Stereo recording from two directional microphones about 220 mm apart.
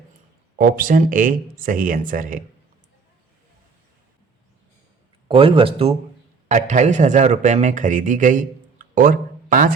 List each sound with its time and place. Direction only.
0.6 s speech: 40° right (ahead or behind)
5.3 s a man's voice: 25° right (ahead or behind)